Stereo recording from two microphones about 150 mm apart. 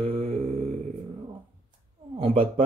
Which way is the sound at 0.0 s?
40° right (ahead or behind).